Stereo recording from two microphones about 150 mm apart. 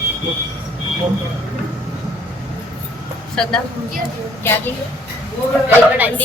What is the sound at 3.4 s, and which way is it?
Speech, 5° left (ahead or behind).